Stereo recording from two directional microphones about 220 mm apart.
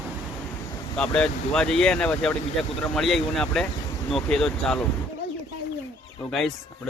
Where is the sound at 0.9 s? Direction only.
5° left (ahead or behind).